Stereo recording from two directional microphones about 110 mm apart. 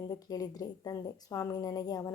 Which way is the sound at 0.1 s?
35° left (ahead or behind).